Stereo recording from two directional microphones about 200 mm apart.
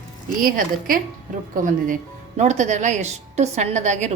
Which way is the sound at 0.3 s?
45° right (ahead or behind).